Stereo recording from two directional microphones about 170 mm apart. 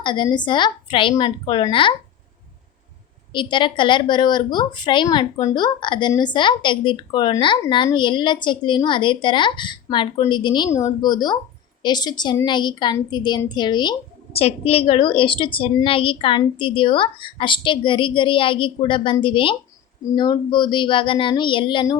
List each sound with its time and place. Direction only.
0.0 s a woman's voice: 25° left (ahead or behind)
3.3 s a woman's voice: 30° left (ahead or behind)